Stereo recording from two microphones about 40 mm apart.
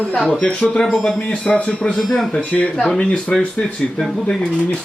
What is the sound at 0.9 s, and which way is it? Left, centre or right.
Speech, centre.